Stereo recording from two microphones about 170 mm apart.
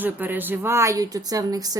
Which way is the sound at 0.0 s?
10° right (ahead or behind).